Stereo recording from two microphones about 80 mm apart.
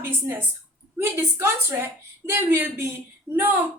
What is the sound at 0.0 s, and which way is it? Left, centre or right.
A woman's voice, right.